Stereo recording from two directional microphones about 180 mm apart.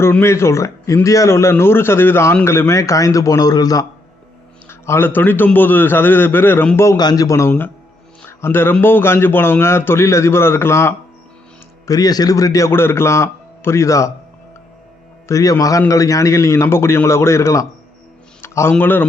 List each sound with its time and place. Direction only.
0.0 s speech: 15° left (ahead or behind)
15.3 s speech: 20° left (ahead or behind)